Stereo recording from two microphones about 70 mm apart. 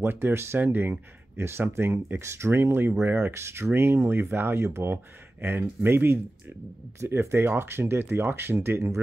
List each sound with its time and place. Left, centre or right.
0.0 s speech: right